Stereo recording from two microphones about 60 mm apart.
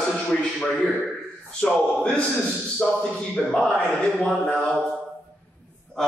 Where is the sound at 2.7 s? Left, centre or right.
Centre.